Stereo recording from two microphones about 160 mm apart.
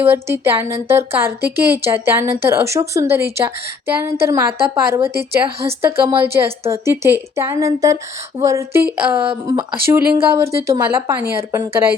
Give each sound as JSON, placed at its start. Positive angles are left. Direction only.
{"t": 0.0, "sound": "speech", "side_deg": -15}